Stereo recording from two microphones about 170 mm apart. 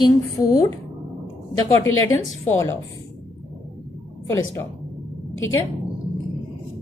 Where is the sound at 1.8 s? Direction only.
20° left (ahead or behind).